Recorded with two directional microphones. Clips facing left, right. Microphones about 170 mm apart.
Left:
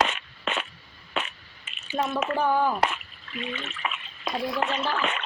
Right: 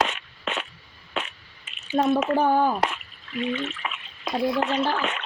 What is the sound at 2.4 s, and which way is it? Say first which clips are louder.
Speech: even; 35° right (ahead or behind).